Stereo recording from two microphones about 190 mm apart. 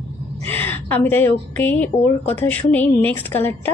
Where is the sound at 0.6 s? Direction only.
10° left (ahead or behind).